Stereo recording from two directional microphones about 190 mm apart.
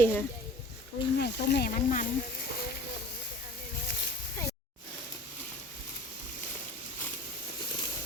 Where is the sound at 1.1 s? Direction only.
60° left (ahead or behind).